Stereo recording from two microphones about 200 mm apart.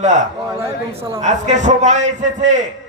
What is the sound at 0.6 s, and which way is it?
Speech, 15° right (ahead or behind).